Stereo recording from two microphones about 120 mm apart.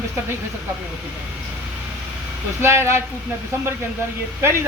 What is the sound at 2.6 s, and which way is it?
Speech, 20° right (ahead or behind).